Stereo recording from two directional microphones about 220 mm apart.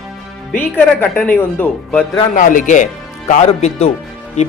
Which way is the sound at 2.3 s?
35° left (ahead or behind).